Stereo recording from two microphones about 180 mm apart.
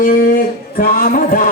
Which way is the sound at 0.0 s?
50° left (ahead or behind).